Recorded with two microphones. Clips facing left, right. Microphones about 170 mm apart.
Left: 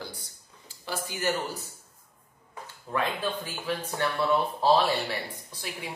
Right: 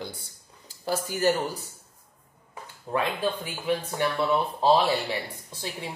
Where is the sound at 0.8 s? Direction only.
40° right (ahead or behind).